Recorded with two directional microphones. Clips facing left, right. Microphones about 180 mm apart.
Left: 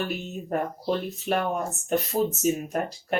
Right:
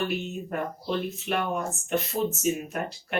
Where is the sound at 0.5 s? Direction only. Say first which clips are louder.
Left 4 dB; 40° left (ahead or behind).